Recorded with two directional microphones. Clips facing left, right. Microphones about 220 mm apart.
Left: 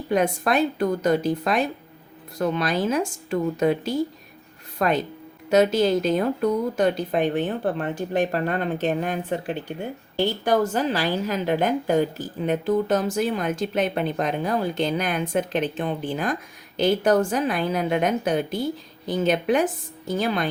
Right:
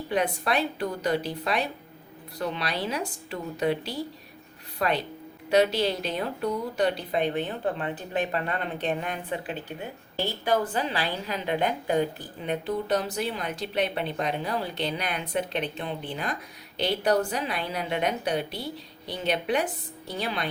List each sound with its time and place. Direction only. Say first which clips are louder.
0.1 s a woman's voice: left 5 dB; 45° left (ahead or behind)